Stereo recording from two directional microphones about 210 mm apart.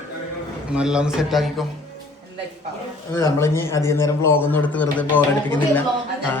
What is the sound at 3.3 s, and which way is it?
Speech, 10° left (ahead or behind).